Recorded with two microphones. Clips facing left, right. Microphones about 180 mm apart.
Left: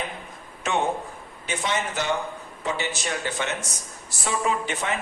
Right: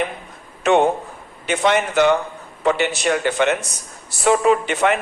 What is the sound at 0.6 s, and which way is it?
A man's voice, 65° right (ahead or behind).